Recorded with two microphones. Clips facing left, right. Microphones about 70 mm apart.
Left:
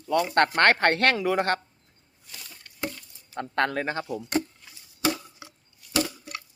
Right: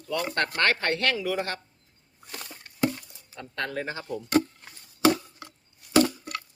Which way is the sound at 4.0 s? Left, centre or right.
Left.